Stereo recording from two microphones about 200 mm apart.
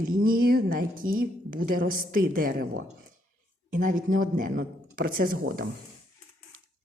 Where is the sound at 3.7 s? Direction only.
40° right (ahead or behind).